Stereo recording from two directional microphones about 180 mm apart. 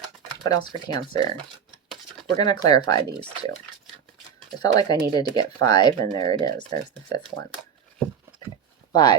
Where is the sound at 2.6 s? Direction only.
20° left (ahead or behind).